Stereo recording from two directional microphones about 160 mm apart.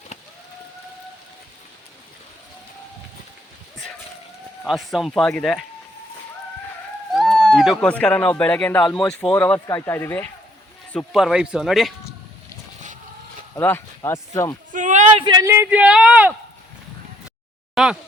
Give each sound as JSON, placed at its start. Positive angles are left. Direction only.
{"t": 4.6, "sound": "speech", "side_deg": 0}
{"t": 7.1, "sound": "speech", "side_deg": 0}
{"t": 10.9, "sound": "speech", "side_deg": 0}
{"t": 13.6, "sound": "speech", "side_deg": 15}
{"t": 14.7, "sound": "a sound", "side_deg": -50}
{"t": 15.2, "sound": "speech", "side_deg": -25}
{"t": 15.4, "sound": "speech", "side_deg": -10}
{"t": 17.8, "sound": "speech", "side_deg": 0}